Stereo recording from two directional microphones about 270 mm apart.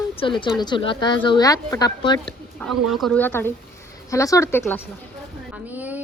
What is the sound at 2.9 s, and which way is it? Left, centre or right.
Speech, centre.